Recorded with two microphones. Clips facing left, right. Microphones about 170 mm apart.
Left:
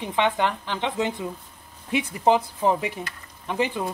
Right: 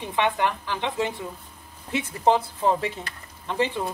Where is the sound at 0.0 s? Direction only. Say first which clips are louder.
Left 1 dB; 20° left (ahead or behind).